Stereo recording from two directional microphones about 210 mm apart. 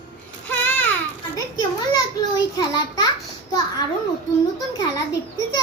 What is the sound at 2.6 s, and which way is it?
Speech, 20° left (ahead or behind).